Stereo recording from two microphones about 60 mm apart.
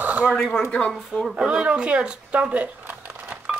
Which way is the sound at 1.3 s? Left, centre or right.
Centre.